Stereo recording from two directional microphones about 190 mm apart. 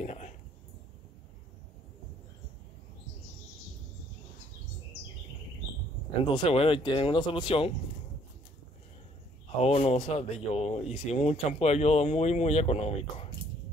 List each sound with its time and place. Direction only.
0.0 s a sound: 35° left (ahead or behind)
6.3 s speech: 30° left (ahead or behind)
9.6 s speech: 35° left (ahead or behind)